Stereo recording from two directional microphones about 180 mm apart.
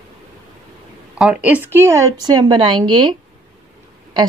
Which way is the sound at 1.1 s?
5° right (ahead or behind).